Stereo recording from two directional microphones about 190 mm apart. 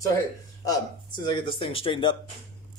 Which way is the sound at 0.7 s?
25° left (ahead or behind).